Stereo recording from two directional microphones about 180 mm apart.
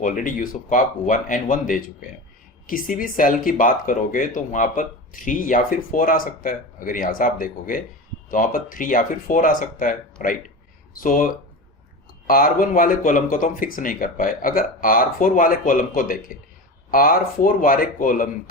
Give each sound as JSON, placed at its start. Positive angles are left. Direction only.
{"t": 0.0, "sound": "speech", "side_deg": 50}